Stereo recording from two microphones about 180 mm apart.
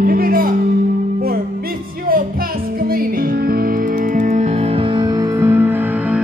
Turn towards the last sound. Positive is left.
turn(degrees=-10)  # may be behind; listen again after turning